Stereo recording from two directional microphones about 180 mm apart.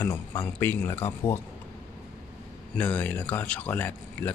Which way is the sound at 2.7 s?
10° left (ahead or behind).